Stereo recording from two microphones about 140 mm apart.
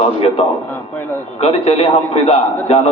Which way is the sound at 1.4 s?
40° left (ahead or behind).